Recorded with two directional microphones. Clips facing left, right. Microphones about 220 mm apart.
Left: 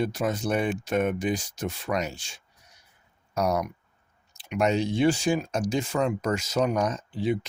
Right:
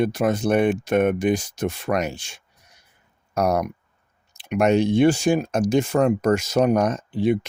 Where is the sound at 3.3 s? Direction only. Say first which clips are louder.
Right 5 dB; 55° right (ahead or behind).